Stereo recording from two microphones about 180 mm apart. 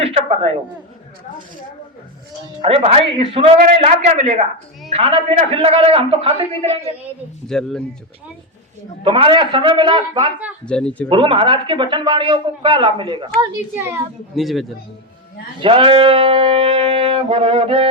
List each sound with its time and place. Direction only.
0.0 s a man's voice: 35° right (ahead or behind)
2.6 s a man's voice: 30° right (ahead or behind)
7.4 s speech: 5° left (ahead or behind)
9.0 s brass instrument: 30° right (ahead or behind)
10.7 s speech: 5° left (ahead or behind)
11.1 s brass instrument: 30° right (ahead or behind)
13.7 s a child's voice: 15° right (ahead or behind)
14.3 s speech: centre (ahead or behind)
15.6 s brass instrument: 30° right (ahead or behind)